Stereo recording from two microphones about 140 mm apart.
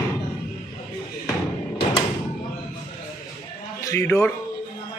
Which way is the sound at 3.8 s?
20° left (ahead or behind).